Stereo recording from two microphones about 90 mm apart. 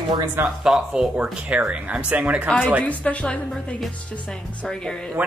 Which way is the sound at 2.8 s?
15° left (ahead or behind).